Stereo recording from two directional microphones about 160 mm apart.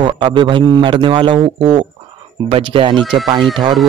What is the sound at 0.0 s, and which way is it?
Speech, 30° right (ahead or behind).